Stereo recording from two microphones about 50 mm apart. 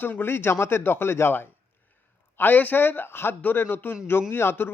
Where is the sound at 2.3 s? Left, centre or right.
Left.